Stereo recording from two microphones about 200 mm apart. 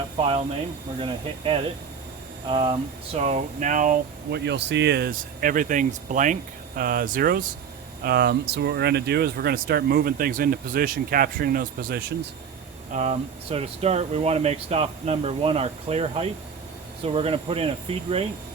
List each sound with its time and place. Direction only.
0.2 s speech: 25° right (ahead or behind); by 11.9 s 50° right (ahead or behind)
12.9 s speech: 35° right (ahead or behind)